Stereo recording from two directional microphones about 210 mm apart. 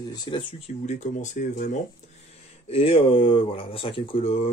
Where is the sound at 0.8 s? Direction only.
35° left (ahead or behind).